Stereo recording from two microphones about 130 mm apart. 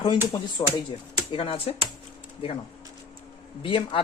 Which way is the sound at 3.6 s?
45° left (ahead or behind).